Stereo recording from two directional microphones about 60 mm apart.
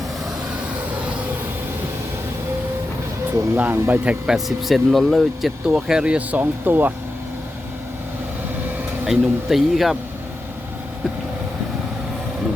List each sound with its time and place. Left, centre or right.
3.5 s speech: right
4.3 s speech: centre
5.6 s speech: centre
6.1 s speech: right
9.0 s speech: centre